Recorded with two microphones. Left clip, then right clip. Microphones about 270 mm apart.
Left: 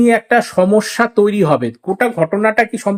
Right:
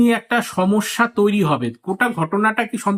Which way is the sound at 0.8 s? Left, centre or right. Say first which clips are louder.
Left 5 dB; centre.